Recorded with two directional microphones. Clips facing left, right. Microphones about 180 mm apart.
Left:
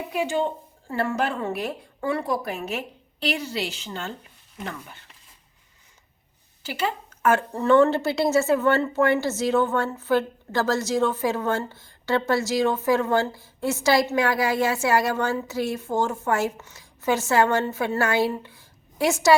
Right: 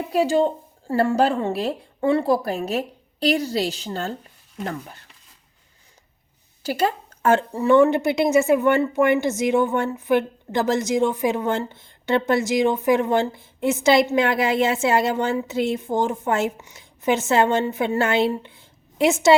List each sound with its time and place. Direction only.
0.1 s speech: 35° right (ahead or behind)
6.6 s a sound: 40° right (ahead or behind)
7.5 s a woman's voice: 10° right (ahead or behind)